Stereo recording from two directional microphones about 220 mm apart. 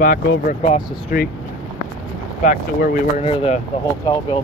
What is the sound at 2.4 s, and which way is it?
Speech, 40° left (ahead or behind).